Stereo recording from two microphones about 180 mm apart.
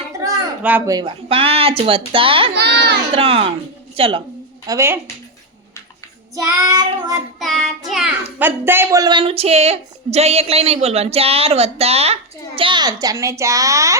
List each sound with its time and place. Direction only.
0.2 s a sound: 20° right (ahead or behind)
0.9 s a woman's voice: 25° right (ahead or behind)
2.5 s a child's voice: 70° right (ahead or behind)
3.2 s a child's voice: 30° right (ahead or behind)
4.6 s speech: 15° right (ahead or behind)
6.3 s a woman's voice: 20° right (ahead or behind)
7.3 s a child's voice: centre (ahead or behind); by 14.0 s 15° right (ahead or behind)